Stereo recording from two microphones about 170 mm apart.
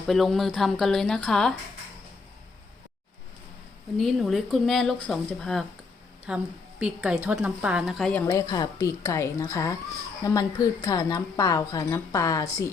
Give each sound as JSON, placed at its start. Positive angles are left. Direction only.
{"t": 0.1, "sound": "speech", "side_deg": 0}
{"t": 3.9, "sound": "a woman's voice", "side_deg": 0}
{"t": 8.3, "sound": "a woman's voice", "side_deg": 20}